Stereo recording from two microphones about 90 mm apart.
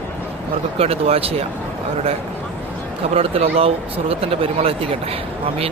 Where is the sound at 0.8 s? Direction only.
90° right.